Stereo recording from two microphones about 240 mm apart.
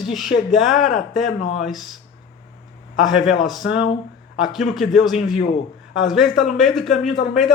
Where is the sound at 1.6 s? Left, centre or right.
Centre.